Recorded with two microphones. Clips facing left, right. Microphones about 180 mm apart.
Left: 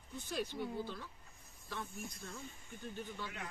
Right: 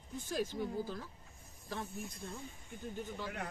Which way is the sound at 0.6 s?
40° right (ahead or behind).